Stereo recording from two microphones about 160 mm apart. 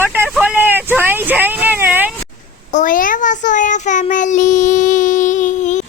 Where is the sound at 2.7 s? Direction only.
55° left (ahead or behind).